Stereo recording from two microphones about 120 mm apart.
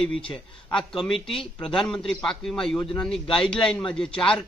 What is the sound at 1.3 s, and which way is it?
Speech, 5° left (ahead or behind).